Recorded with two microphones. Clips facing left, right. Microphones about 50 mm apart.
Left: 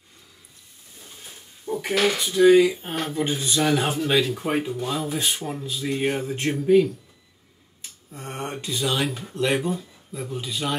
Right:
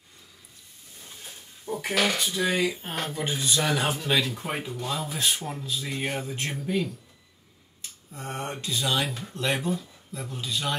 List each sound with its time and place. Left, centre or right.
1.0 s a sound: centre
2.2 s speech: centre
8.2 s speech: centre